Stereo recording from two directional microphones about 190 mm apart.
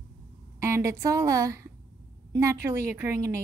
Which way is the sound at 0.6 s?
15° right (ahead or behind).